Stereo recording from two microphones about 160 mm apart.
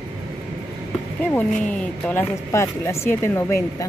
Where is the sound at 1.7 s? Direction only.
10° left (ahead or behind).